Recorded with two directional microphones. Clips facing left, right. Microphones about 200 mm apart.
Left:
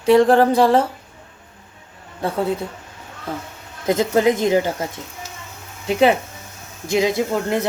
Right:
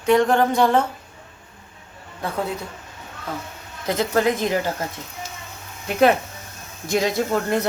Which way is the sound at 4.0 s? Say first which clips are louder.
Left 3 dB; 20° left (ahead or behind).